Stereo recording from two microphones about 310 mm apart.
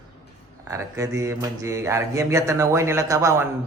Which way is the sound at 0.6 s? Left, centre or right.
Centre.